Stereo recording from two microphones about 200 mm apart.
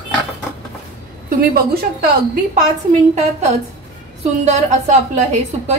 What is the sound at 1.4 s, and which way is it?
Speech, 50° right (ahead or behind).